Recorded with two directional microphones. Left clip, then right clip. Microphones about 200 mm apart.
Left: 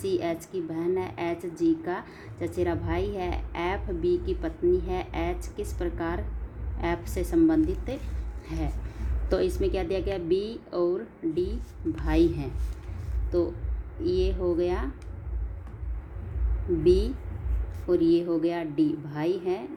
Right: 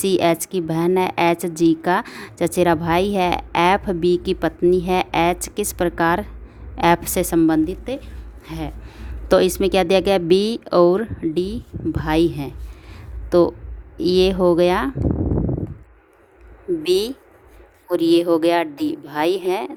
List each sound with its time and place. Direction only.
0.0 s a woman's voice: 50° right (ahead or behind); by 8.7 s 35° right (ahead or behind)
9.3 s a woman's voice: 50° right (ahead or behind)
13.3 s a woman's voice: 55° right (ahead or behind)
16.8 s a woman's voice: 50° right (ahead or behind)